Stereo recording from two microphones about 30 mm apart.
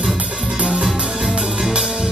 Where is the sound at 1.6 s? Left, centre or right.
Centre.